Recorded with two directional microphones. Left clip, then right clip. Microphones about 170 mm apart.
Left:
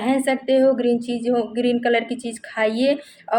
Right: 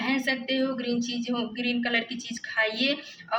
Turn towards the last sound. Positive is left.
turn(degrees=50)  # may be behind; listen again after turning